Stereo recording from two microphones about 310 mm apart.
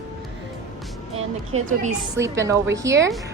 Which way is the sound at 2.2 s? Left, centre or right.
Centre.